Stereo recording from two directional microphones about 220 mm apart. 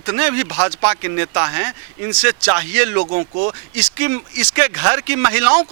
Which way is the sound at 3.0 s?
35° right (ahead or behind).